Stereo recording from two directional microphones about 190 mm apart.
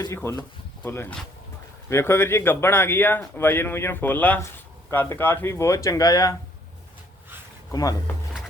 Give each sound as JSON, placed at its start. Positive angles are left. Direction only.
{"t": 0.0, "sound": "speech", "side_deg": 15}
{"t": 7.7, "sound": "speech", "side_deg": 20}